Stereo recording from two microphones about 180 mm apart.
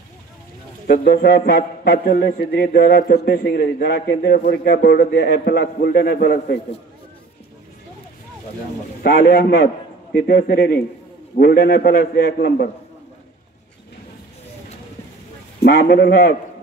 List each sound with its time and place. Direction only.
0.9 s a man's voice: 55° left (ahead or behind)
9.0 s a man's voice: 65° left (ahead or behind)
10.1 s a man's voice: 60° left (ahead or behind)
15.6 s a man's voice: 65° left (ahead or behind)